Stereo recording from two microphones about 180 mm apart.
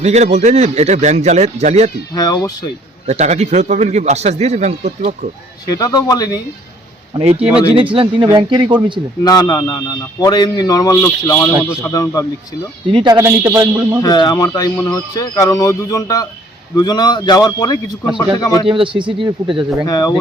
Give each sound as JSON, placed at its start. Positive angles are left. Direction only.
{"t": 0.0, "sound": "speech", "side_deg": -40}
{"t": 2.1, "sound": "speech", "side_deg": 20}
{"t": 3.1, "sound": "speech", "side_deg": -40}
{"t": 5.7, "sound": "speech", "side_deg": 20}
{"t": 7.1, "sound": "speech", "side_deg": -30}
{"t": 9.2, "sound": "speech", "side_deg": 20}
{"t": 12.9, "sound": "speech", "side_deg": -25}
{"t": 13.1, "sound": "a man's voice", "side_deg": -15}
{"t": 14.0, "sound": "speech", "side_deg": 20}
{"t": 18.6, "sound": "speech", "side_deg": -30}
{"t": 19.9, "sound": "speech", "side_deg": 20}